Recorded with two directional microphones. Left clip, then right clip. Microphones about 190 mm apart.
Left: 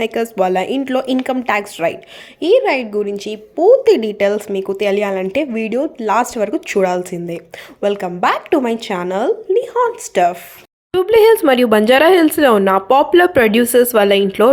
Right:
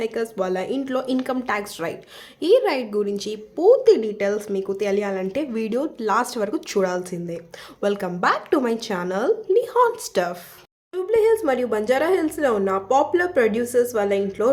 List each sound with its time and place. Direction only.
0.0 s speech: 35° left (ahead or behind); by 9.9 s 10° left (ahead or behind)
10.9 s speech: 45° left (ahead or behind)